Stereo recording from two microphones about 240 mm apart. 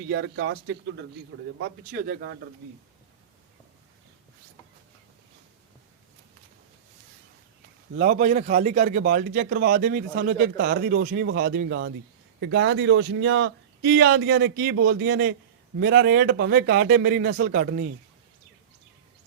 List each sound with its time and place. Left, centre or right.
0.1 s a man's voice: right
1.6 s a man's voice: right
7.9 s a man's voice: right